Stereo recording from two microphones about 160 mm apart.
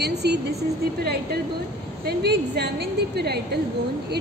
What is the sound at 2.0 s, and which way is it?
A woman's voice, 90° right.